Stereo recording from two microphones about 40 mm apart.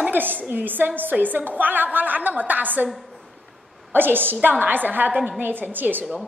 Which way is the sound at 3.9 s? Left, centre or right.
Right.